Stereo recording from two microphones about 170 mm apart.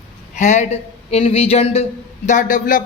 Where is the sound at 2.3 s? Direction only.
50° left (ahead or behind).